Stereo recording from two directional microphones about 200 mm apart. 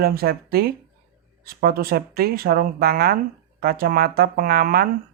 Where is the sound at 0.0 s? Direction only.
50° right (ahead or behind).